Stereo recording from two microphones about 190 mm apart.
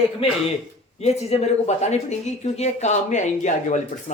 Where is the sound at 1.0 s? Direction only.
35° left (ahead or behind).